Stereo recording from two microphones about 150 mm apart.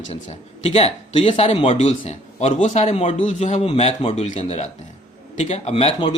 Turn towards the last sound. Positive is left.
turn(degrees=40)  # may be behind; listen again after turning